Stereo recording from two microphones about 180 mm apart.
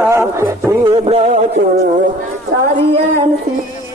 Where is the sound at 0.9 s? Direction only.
35° right (ahead or behind).